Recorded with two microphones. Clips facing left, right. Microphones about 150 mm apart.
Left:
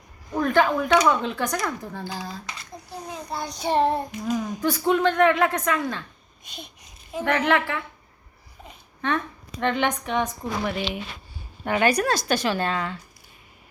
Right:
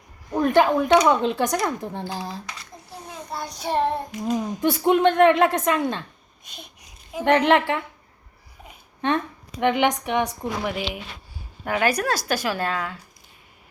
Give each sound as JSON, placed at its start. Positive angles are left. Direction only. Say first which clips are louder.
{"t": 0.3, "sound": "a woman's voice", "louder": "right 3 dB", "side_deg": -20}
{"t": 3.3, "sound": "a woman's voice", "louder": "left 2 dB", "side_deg": 0}
{"t": 4.4, "sound": "a woman's voice", "louder": "right 3 dB", "side_deg": -20}
{"t": 7.1, "sound": "a woman's voice", "louder": "right 4 dB", "side_deg": -15}
{"t": 9.0, "sound": "a woman's voice", "louder": "right 3 dB", "side_deg": -20}